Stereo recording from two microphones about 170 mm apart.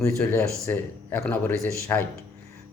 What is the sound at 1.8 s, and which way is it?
Speech, 15° left (ahead or behind).